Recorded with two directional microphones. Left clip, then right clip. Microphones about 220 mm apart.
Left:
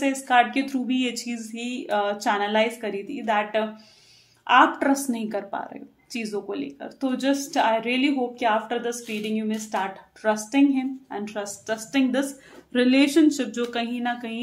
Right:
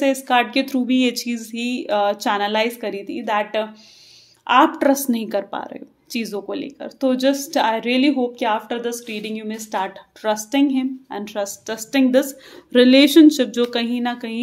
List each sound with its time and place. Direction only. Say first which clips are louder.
0.0 s a woman's voice: right 3 dB; 45° right (ahead or behind)